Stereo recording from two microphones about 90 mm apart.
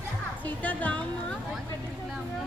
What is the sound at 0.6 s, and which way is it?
Speech, 15° left (ahead or behind).